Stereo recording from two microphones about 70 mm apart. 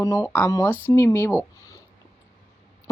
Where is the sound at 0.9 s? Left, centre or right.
Left.